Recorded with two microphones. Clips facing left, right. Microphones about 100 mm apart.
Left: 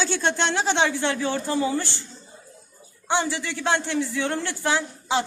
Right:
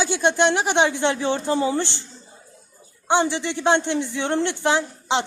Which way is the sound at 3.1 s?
20° right (ahead or behind).